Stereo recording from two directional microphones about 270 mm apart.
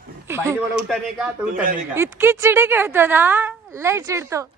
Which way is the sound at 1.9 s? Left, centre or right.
Centre.